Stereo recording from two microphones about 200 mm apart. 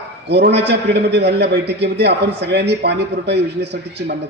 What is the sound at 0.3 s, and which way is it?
A man's voice, 55° right (ahead or behind).